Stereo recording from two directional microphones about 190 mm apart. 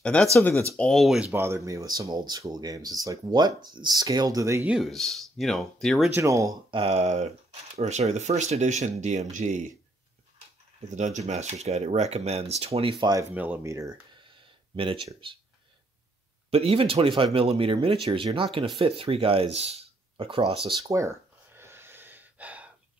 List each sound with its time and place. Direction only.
0.0 s speech: 5° left (ahead or behind); by 4.7 s 15° right (ahead or behind)
4.7 s speech: centre (ahead or behind)
6.1 s speech: 15° right (ahead or behind); by 9.7 s 40° right (ahead or behind)
10.9 s speech: 40° right (ahead or behind)
13.3 s speech: 10° right (ahead or behind); by 15.3 s 25° right (ahead or behind)
16.4 s speech: 30° right (ahead or behind)
21.5 s gasp: 10° right (ahead or behind)